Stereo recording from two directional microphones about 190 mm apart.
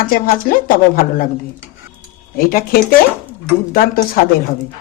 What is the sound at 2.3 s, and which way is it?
Speech, 50° left (ahead or behind).